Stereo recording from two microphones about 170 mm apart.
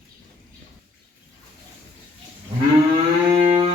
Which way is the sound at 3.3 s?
35° right (ahead or behind).